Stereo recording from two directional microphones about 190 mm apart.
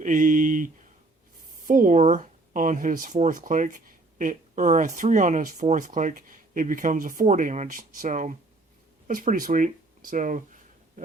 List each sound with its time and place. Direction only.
0.0 s speech: 45° right (ahead or behind)